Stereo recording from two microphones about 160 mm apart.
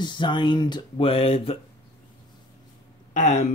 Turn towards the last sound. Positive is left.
turn(degrees=50)  # may be behind; listen again after turning